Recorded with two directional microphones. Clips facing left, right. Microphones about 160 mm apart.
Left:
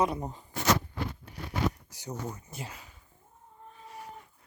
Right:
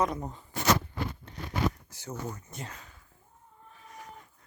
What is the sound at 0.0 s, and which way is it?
Speech, 10° left (ahead or behind).